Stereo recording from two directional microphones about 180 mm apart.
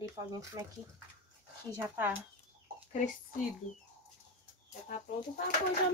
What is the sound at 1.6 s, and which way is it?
Speech, 15° right (ahead or behind).